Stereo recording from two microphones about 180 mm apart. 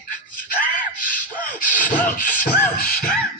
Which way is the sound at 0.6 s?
50° left (ahead or behind).